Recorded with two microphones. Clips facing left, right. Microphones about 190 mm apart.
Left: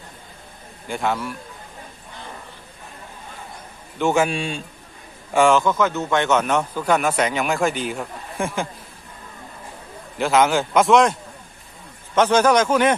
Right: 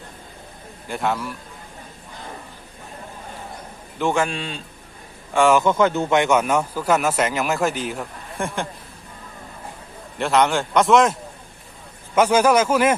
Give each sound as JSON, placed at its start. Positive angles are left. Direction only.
{"t": 0.9, "sound": "a man's voice", "side_deg": 0}
{"t": 3.9, "sound": "a man's voice", "side_deg": 5}
{"t": 5.3, "sound": "a man's voice", "side_deg": 0}
{"t": 5.6, "sound": "speech", "side_deg": -30}
{"t": 6.1, "sound": "a man's voice", "side_deg": -10}
{"t": 10.2, "sound": "a man's voice", "side_deg": 0}